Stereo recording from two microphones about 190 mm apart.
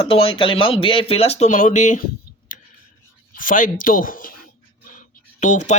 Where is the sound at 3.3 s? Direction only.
45° left (ahead or behind).